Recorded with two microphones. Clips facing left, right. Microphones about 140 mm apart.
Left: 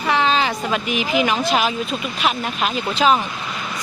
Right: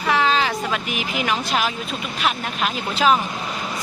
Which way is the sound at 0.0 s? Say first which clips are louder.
Left 1 dB; centre (ahead or behind).